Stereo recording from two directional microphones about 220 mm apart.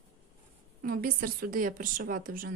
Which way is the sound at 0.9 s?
40° right (ahead or behind).